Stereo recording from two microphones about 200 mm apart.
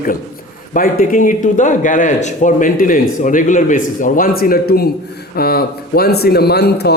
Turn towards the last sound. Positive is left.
turn(degrees=55)  # may be behind; listen again after turning